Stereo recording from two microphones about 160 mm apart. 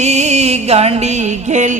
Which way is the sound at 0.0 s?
45° right (ahead or behind).